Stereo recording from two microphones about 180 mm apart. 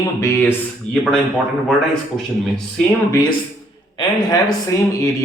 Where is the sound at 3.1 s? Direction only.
20° left (ahead or behind).